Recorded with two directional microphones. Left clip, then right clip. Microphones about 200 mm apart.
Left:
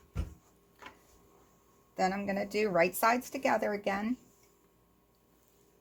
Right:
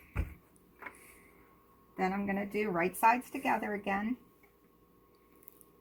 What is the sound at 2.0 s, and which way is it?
A woman's voice, 40° left (ahead or behind).